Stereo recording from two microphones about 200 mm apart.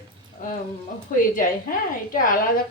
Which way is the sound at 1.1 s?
40° left (ahead or behind).